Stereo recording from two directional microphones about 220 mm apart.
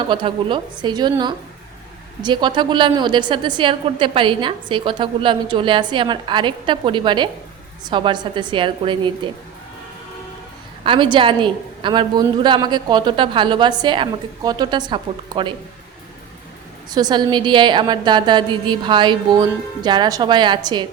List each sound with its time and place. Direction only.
0.0 s a woman's voice: 20° right (ahead or behind)
10.8 s a woman's voice: 20° right (ahead or behind)
16.9 s a woman's voice: 20° right (ahead or behind)